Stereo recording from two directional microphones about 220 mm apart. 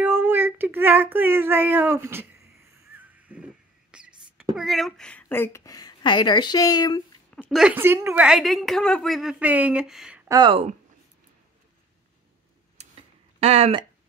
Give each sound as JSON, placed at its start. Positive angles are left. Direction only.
{"t": 0.0, "sound": "child singing", "side_deg": -10}
{"t": 2.9, "sound": "a sound", "side_deg": -5}
{"t": 3.9, "sound": "speech", "side_deg": -5}
{"t": 7.4, "sound": "a woman's voice", "side_deg": -5}
{"t": 13.4, "sound": "speech", "side_deg": -30}